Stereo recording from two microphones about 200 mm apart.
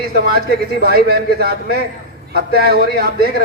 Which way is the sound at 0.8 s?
50° right (ahead or behind).